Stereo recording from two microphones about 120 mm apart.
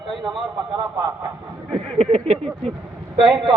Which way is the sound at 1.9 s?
65° right (ahead or behind).